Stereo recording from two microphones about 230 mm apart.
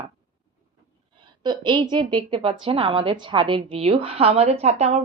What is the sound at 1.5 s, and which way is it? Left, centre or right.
A woman's voice, centre.